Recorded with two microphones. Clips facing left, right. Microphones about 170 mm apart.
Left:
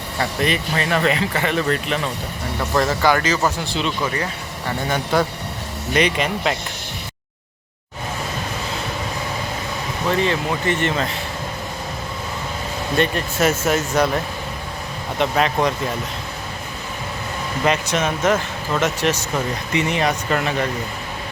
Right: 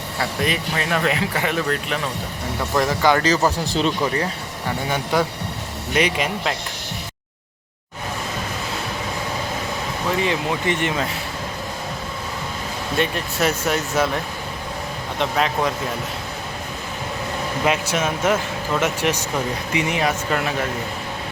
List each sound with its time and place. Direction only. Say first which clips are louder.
0.2 s speech: left 2 dB; 5° right (ahead or behind)
2.7 s speech: even; 15° right (ahead or behind)
3.2 s speech: right 2 dB; 35° right (ahead or behind)
5.1 s speech: left 1 dB; 10° right (ahead or behind)
10.1 s speech: left 2 dB; 15° right (ahead or behind)
13.0 s speech: left 2 dB; centre (ahead or behind)
15.2 s speech: left 2 dB; centre (ahead or behind)
17.7 s speech: left 2 dB; 5° right (ahead or behind)